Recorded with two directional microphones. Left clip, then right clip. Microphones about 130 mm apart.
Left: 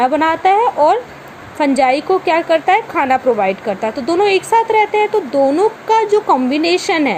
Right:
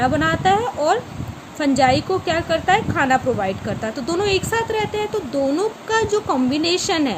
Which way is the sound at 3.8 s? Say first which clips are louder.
Left 7 dB; 20° left (ahead or behind).